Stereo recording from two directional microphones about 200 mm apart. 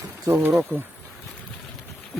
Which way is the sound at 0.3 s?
10° right (ahead or behind).